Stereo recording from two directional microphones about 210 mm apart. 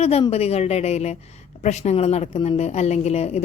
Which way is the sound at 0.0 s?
30° left (ahead or behind).